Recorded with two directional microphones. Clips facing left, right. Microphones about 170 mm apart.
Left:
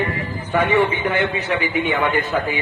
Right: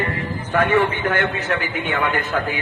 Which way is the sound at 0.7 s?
50° right (ahead or behind).